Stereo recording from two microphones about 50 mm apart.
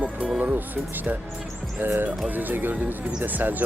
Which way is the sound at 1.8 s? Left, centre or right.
Right.